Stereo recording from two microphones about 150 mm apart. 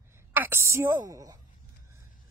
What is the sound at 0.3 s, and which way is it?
A woman's voice, 15° right (ahead or behind).